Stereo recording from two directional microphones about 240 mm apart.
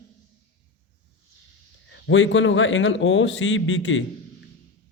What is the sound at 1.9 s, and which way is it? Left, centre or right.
A man's voice, left.